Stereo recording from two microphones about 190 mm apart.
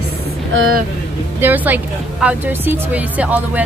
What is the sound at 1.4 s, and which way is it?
Speech, 10° right (ahead or behind).